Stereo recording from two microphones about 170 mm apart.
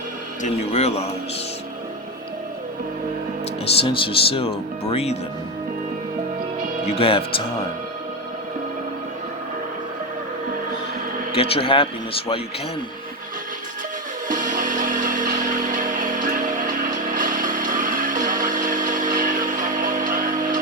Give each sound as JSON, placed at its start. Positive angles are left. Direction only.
{"t": 0.4, "sound": "speech", "side_deg": 40}
{"t": 3.7, "sound": "speech", "side_deg": 35}
{"t": 6.8, "sound": "speech", "side_deg": 35}
{"t": 11.3, "sound": "speech", "side_deg": 35}
{"t": 14.3, "sound": "music", "side_deg": -50}